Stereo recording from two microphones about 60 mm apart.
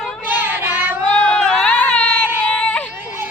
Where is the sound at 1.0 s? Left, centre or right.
Centre.